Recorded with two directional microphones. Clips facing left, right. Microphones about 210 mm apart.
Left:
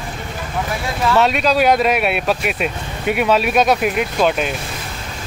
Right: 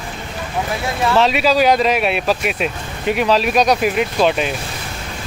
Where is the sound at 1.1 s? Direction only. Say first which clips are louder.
Right 1 dB; centre (ahead or behind).